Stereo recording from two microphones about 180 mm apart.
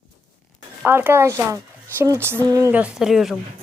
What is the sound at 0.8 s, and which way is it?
Speech, 10° right (ahead or behind).